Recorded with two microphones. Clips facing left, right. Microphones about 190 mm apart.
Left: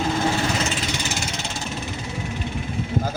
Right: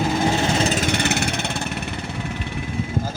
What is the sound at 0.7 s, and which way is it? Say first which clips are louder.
Vehicle: right 6 dB; 50° right (ahead or behind).